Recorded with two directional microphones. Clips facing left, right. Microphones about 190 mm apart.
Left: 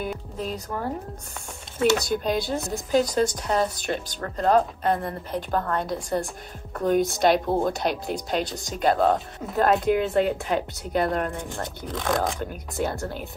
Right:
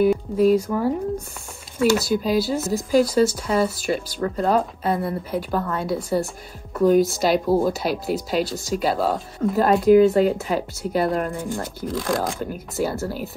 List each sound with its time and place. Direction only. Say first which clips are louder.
0.0 s speech: right 13 dB; 5° right (ahead or behind)
2.0 s speech: right 4 dB; 5° right (ahead or behind)